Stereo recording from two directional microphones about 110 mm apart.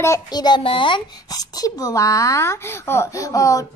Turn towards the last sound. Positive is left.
turn(degrees=30)  # may be behind; listen again after turning